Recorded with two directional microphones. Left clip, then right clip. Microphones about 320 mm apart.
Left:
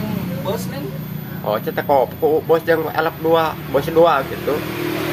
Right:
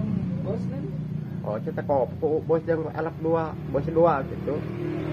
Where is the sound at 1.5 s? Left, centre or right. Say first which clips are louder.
Left 9 dB; centre.